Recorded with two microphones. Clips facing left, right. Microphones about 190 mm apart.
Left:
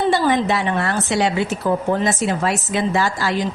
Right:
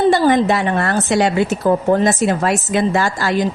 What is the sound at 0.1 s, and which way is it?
A woman's voice, 45° right (ahead or behind).